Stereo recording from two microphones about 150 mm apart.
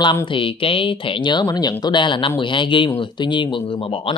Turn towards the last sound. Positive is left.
turn(degrees=40)  # may be behind; listen again after turning